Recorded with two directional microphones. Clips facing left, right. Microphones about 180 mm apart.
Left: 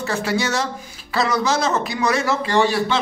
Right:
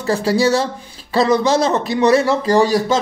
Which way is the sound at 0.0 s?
35° right (ahead or behind).